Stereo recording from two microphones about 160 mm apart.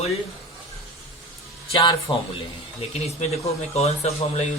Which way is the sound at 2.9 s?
40° left (ahead or behind).